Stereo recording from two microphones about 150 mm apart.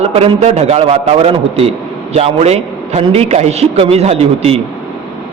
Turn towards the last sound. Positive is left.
turn(degrees=-40)  # may be behind; listen again after turning